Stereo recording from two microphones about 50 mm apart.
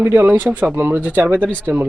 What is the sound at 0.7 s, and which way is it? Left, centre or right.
Speech, right.